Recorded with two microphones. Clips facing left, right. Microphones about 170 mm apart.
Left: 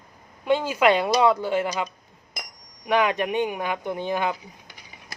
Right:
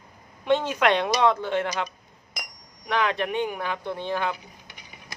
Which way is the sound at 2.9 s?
15° left (ahead or behind).